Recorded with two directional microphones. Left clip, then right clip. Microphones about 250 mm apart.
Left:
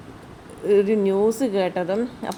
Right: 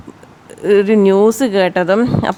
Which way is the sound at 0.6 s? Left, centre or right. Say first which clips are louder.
Right 8 dB; right.